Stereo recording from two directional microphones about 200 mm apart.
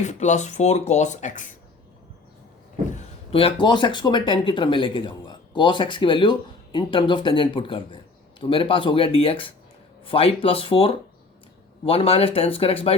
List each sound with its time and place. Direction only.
0.0 s speech: 35° left (ahead or behind)
2.9 s speech: 30° left (ahead or behind)